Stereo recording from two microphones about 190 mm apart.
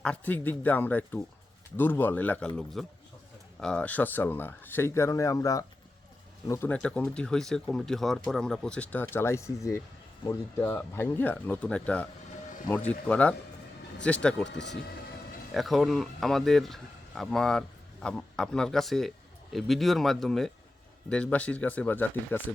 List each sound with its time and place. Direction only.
0.0 s speech: 10° left (ahead or behind)
14.5 s speech: 65° left (ahead or behind)
15.5 s speech: centre (ahead or behind)